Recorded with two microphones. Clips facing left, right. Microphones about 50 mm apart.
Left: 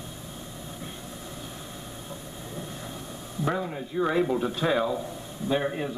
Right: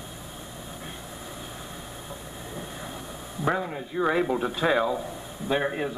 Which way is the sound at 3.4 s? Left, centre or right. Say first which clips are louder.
Right 2 dB; centre.